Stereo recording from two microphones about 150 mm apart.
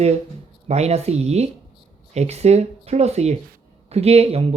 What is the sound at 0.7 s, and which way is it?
Speech, 45° right (ahead or behind).